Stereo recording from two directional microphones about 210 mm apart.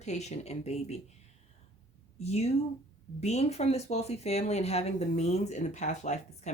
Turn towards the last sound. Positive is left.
turn(degrees=35)  # may be behind; listen again after turning